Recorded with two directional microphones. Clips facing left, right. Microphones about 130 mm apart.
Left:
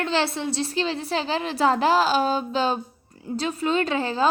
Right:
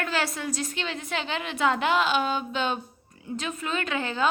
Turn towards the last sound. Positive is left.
turn(degrees=35)  # may be behind; listen again after turning